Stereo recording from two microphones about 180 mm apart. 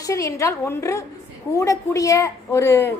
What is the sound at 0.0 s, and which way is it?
A woman's voice, 20° left (ahead or behind).